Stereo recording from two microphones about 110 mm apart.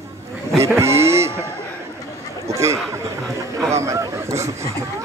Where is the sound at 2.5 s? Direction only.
25° right (ahead or behind).